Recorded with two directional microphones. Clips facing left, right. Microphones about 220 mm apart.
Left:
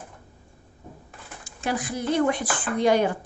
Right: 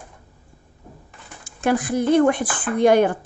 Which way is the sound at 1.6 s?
50° right (ahead or behind).